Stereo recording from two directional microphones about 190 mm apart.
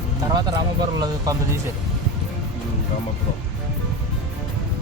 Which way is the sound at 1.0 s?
20° right (ahead or behind).